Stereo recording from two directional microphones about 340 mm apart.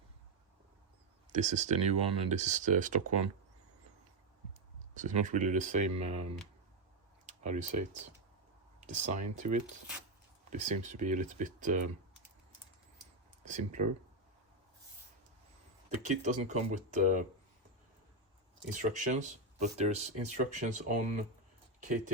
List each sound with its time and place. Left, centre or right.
1.3 s speech: right
4.9 s speech: right
7.3 s a sound: right
8.8 s speech: right
13.4 s speech: right
16.0 s speech: right
18.7 s speech: right